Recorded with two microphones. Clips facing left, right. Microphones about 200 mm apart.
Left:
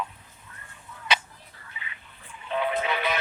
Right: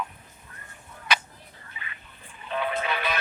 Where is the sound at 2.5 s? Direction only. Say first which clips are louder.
Left 2 dB; 20° left (ahead or behind).